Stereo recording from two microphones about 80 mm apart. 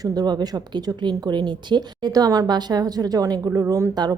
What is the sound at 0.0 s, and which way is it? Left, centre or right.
Speech, right.